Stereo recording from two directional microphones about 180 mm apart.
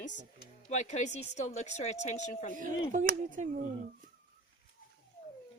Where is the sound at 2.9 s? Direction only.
45° right (ahead or behind).